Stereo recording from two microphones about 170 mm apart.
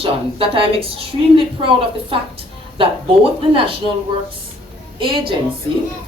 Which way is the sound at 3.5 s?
30° right (ahead or behind).